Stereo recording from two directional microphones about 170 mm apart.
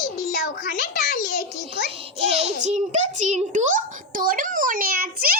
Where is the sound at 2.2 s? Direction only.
35° right (ahead or behind); by 5.4 s 55° right (ahead or behind).